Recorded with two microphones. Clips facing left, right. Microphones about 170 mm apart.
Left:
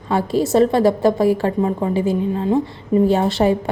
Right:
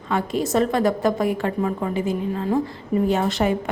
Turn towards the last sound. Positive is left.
turn(degrees=30)  # may be behind; listen again after turning